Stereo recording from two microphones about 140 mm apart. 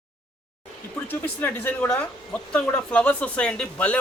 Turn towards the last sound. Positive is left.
turn(degrees=5)  # may be behind; listen again after turning